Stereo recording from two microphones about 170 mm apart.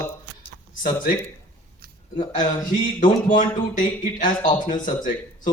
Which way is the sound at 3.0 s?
50° left (ahead or behind).